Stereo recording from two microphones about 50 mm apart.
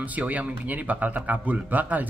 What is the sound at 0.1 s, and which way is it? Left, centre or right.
Speech, right.